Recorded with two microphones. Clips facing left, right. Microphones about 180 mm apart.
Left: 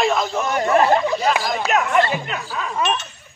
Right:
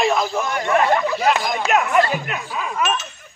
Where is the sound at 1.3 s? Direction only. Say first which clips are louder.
Right 1 dB; centre (ahead or behind).